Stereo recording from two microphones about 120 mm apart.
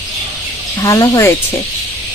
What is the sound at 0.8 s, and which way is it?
Speech, 25° left (ahead or behind).